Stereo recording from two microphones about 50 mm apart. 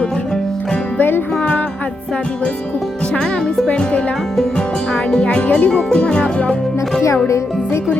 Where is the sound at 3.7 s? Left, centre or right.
Left.